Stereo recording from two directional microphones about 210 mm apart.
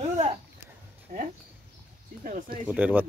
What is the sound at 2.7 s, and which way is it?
Speech, 5° right (ahead or behind).